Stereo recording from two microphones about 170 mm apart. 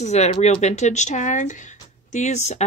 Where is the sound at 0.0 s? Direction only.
40° left (ahead or behind).